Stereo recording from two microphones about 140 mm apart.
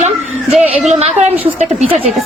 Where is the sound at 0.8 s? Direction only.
55° right (ahead or behind).